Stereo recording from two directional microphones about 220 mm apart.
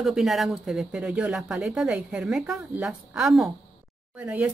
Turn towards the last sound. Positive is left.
turn(degrees=-5)  # may be behind; listen again after turning